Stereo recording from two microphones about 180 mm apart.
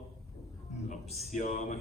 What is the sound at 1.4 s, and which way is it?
Speech, 40° left (ahead or behind).